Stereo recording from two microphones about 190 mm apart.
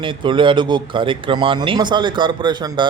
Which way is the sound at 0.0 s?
25° right (ahead or behind).